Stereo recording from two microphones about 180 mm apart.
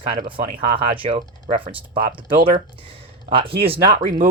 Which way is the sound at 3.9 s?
45° right (ahead or behind).